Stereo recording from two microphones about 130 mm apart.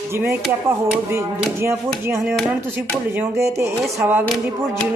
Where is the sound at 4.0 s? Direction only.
15° right (ahead or behind).